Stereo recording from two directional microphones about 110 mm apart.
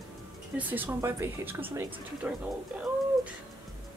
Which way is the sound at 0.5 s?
15° right (ahead or behind).